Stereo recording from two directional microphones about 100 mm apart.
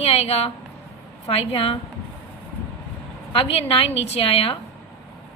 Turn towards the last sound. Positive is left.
turn(degrees=75)  # may be behind; listen again after turning